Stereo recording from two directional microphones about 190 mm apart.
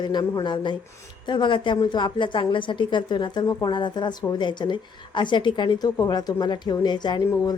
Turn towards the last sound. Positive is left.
turn(degrees=20)  # may be behind; listen again after turning